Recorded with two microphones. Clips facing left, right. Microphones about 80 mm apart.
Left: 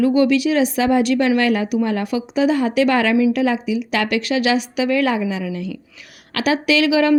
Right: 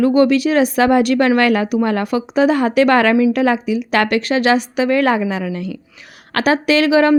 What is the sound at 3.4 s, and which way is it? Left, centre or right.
A woman's voice, right.